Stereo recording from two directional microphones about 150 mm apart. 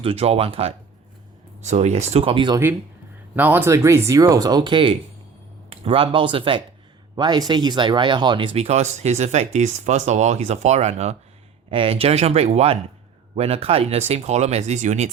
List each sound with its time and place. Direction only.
0.0 s speech: 40° right (ahead or behind)
3.3 s speech: 15° right (ahead or behind); by 15.1 s 50° right (ahead or behind)